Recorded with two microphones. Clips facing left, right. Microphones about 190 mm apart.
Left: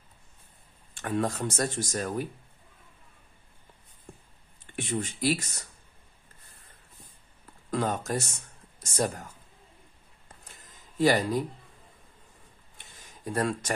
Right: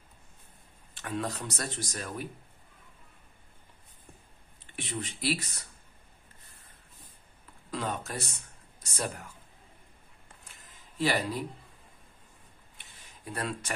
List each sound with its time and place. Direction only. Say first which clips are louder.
0.9 s speech: left 5 dB; 45° left (ahead or behind)
4.7 s speech: left 6 dB; 45° left (ahead or behind)
7.7 s speech: left 6 dB; 45° left (ahead or behind)
11.0 s speech: left 6 dB; 45° left (ahead or behind)
13.0 s a sound: left 7 dB; 45° left (ahead or behind)